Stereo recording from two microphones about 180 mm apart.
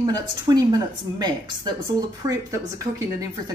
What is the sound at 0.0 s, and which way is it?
Speech, 20° right (ahead or behind).